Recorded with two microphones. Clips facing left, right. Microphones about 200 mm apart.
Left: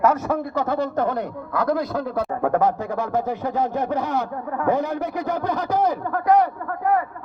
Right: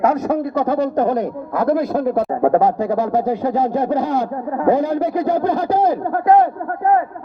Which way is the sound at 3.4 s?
20° right (ahead or behind).